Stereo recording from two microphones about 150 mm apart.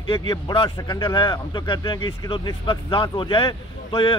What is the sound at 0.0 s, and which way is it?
Speech, 35° left (ahead or behind).